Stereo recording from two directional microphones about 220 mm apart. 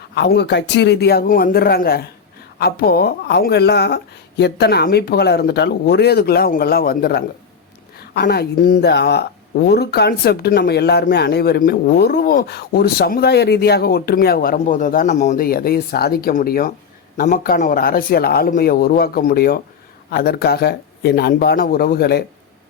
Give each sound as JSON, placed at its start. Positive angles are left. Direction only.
{"t": 0.1, "sound": "speech", "side_deg": 50}